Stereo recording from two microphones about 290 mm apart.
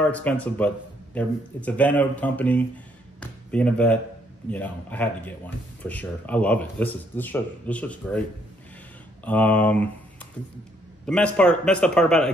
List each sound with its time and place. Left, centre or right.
0.0 s speech: centre
9.2 s speech: centre
11.1 s speech: centre